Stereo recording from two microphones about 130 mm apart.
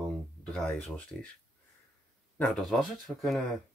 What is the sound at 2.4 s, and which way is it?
Speech, centre (ahead or behind).